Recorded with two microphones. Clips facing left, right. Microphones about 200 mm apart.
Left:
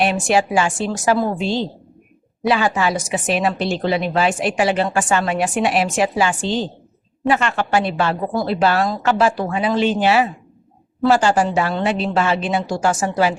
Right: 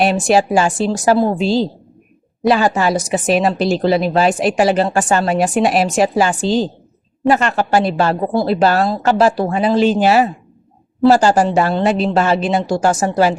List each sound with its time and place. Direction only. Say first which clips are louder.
0.0 s a woman's voice: right 4 dB; 35° right (ahead or behind)